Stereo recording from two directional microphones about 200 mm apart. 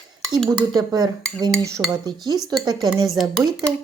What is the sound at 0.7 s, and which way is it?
A woman's voice, 20° right (ahead or behind).